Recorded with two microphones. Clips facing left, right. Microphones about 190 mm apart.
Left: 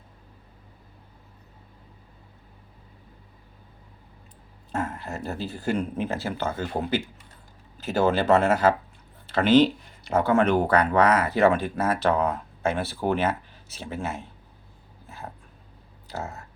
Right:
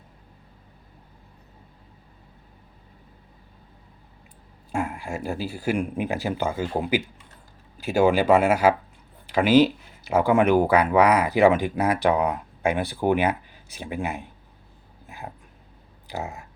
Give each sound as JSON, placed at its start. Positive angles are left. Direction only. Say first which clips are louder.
{"t": 4.7, "sound": "speech", "louder": "right 2 dB", "side_deg": -10}
{"t": 15.0, "sound": "a sound", "louder": "right 1 dB", "side_deg": -15}
{"t": 16.0, "sound": "speech", "louder": "right 2 dB", "side_deg": -15}